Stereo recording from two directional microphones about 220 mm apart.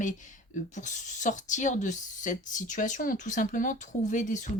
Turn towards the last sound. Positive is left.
turn(degrees=35)  # may be behind; listen again after turning